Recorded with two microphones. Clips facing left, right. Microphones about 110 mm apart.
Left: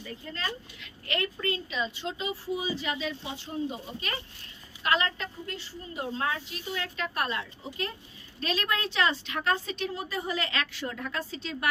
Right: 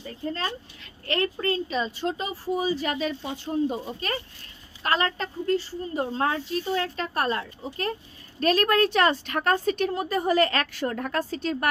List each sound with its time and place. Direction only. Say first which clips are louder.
0.0 s a woman's voice: right 6 dB; 35° right (ahead or behind)